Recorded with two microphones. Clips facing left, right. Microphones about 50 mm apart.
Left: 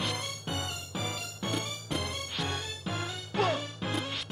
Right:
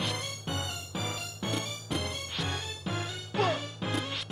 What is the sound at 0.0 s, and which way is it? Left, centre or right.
Music, centre.